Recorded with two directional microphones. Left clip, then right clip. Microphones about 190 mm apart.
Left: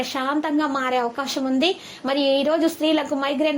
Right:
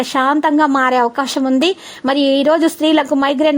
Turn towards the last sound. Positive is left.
turn(degrees=-45)  # may be behind; listen again after turning